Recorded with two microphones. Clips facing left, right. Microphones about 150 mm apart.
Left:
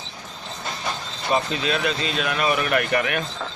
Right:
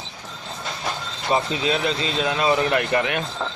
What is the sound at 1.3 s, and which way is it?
Speech, 20° right (ahead or behind).